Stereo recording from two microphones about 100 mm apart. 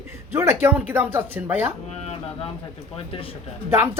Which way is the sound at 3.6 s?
25° right (ahead or behind).